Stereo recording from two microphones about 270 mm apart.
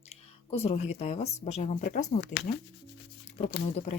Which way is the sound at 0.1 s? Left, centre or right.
Left.